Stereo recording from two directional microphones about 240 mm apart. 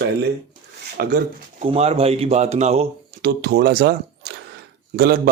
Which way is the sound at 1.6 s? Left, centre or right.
Right.